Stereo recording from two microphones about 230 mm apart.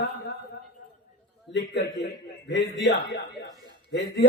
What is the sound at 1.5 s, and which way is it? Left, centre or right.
A man's voice, left.